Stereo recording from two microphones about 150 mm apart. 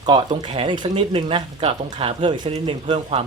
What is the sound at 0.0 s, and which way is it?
Speech, 30° right (ahead or behind).